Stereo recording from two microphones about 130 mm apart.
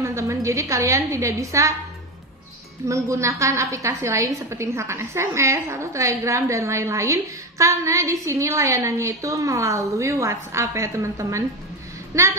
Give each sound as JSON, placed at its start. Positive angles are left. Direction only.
{"t": 0.0, "sound": "a woman's voice", "side_deg": -25}
{"t": 2.9, "sound": "a woman's voice", "side_deg": -25}